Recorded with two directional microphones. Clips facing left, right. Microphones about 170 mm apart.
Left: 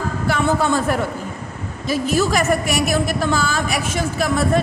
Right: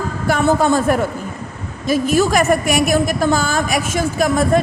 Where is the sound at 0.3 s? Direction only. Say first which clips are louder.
Right 4 dB; 45° right (ahead or behind).